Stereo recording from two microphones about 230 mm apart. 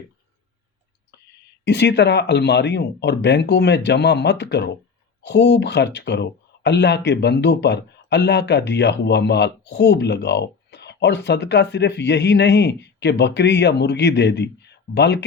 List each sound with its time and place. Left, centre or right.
1.6 s speech: left